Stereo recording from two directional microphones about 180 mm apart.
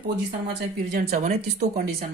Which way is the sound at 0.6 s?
60° right (ahead or behind).